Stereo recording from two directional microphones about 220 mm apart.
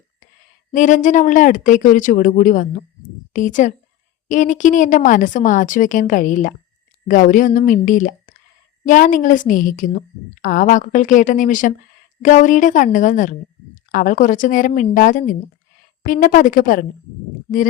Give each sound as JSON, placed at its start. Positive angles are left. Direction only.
{"t": 0.7, "sound": "a woman's voice", "side_deg": 35}